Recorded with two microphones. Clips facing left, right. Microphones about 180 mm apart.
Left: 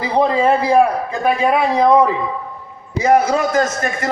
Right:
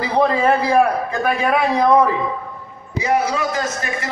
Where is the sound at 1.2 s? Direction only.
25° left (ahead or behind).